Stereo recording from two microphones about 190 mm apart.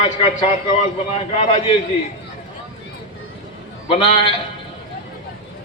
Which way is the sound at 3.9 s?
30° left (ahead or behind).